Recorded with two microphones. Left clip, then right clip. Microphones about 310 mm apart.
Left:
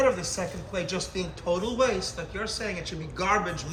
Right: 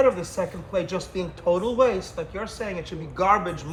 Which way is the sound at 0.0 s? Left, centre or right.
Centre.